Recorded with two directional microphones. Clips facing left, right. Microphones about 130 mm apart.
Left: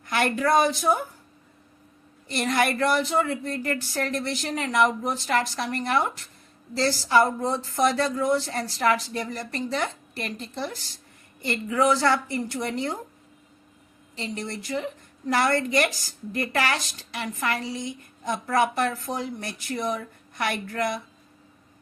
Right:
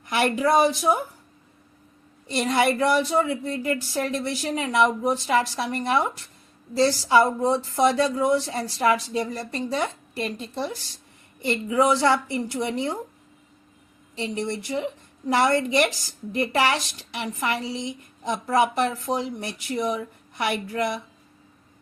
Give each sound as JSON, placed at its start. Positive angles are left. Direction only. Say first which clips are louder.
{"t": 0.0, "sound": "a woman's voice", "louder": "right 2 dB", "side_deg": -15}
{"t": 2.2, "sound": "a woman's voice", "louder": "right 2 dB", "side_deg": -15}
{"t": 14.3, "sound": "a woman's voice", "louder": "right 3 dB", "side_deg": -20}